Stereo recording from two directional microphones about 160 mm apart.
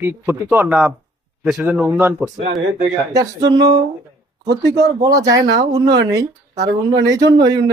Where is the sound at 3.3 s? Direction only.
25° right (ahead or behind).